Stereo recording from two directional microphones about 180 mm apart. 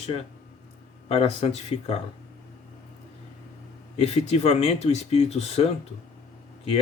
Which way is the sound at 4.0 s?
35° left (ahead or behind).